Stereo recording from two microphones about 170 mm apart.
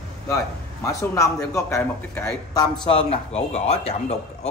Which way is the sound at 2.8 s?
35° left (ahead or behind).